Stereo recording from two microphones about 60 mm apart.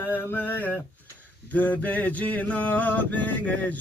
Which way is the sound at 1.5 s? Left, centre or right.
Left.